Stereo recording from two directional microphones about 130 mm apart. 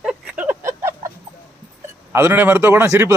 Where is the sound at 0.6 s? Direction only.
20° right (ahead or behind).